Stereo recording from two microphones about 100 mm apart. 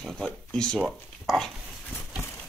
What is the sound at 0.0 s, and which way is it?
Speech, 5° left (ahead or behind).